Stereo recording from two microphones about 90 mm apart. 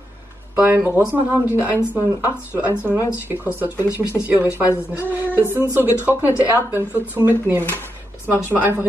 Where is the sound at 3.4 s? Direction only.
20° right (ahead or behind).